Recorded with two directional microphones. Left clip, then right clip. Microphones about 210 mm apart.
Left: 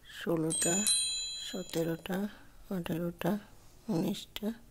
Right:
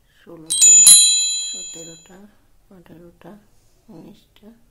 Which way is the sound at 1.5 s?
55° left (ahead or behind).